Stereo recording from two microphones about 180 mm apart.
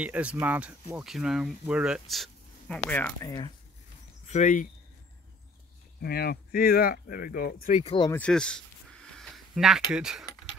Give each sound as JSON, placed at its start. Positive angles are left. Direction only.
{"t": 0.0, "sound": "speech", "side_deg": -5}
{"t": 3.3, "sound": "speech", "side_deg": 25}
{"t": 4.3, "sound": "speech", "side_deg": 45}
{"t": 5.9, "sound": "speech", "side_deg": 60}
{"t": 7.7, "sound": "speech", "side_deg": 30}
{"t": 8.1, "sound": "speech", "side_deg": 5}
{"t": 9.1, "sound": "a sound", "side_deg": 0}